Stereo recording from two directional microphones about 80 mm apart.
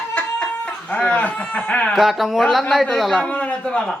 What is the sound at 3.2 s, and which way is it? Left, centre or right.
Speech, centre.